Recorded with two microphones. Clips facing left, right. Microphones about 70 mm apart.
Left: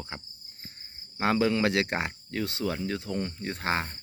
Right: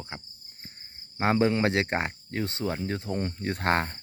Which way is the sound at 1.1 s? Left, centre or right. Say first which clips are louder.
Right 1 dB; right.